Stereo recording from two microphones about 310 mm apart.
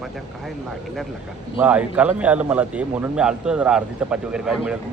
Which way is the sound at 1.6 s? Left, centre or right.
Centre.